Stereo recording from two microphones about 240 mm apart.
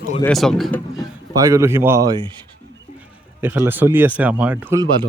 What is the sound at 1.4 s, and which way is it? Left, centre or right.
Speech, centre.